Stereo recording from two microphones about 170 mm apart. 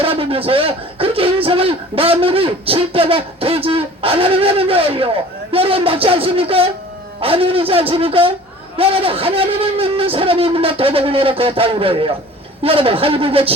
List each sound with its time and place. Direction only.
0.0 s a man's voice: 35° right (ahead or behind)